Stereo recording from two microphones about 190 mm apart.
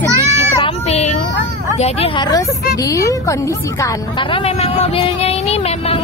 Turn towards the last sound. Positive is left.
turn(degrees=30)  # may be behind; listen again after turning